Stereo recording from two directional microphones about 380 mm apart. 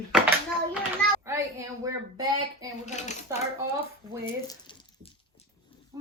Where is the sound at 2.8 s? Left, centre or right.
Centre.